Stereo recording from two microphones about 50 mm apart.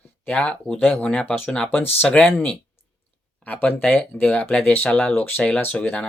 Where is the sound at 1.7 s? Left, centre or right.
Left.